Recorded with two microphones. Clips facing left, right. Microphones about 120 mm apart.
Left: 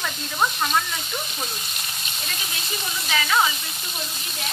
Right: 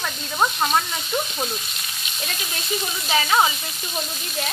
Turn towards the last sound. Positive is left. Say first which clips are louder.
# right 2 dB
turn(degrees=-30)  # may be behind; listen again after turning